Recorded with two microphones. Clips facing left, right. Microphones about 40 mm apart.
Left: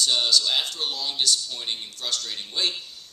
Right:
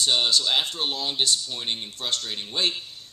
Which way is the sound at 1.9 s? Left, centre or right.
Right.